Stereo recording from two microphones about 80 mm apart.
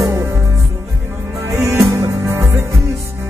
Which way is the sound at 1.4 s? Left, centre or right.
Right.